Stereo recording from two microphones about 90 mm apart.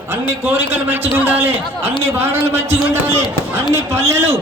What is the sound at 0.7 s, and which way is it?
A man's voice, 20° right (ahead or behind).